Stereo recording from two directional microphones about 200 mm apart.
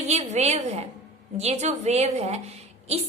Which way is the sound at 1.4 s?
35° right (ahead or behind).